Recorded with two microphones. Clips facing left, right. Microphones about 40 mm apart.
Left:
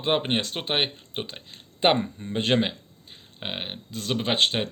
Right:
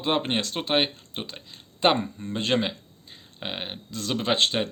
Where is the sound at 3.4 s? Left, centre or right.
Centre.